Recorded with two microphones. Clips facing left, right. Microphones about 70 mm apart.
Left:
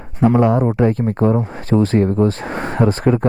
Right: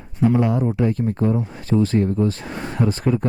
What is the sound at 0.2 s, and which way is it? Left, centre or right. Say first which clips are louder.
Speech: left 5 dB; left.